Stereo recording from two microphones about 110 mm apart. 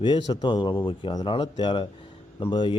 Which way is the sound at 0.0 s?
45° left (ahead or behind).